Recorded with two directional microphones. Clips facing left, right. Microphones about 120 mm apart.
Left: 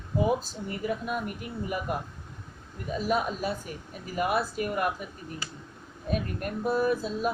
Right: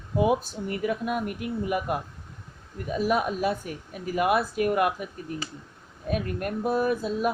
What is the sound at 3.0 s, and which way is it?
Speech, 55° right (ahead or behind).